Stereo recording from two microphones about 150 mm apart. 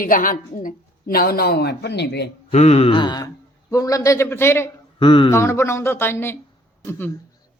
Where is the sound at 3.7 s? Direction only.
20° left (ahead or behind).